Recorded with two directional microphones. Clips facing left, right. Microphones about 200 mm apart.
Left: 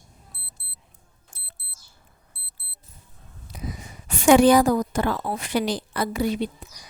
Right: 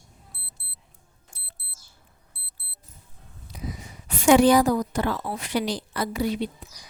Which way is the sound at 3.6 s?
50° left (ahead or behind).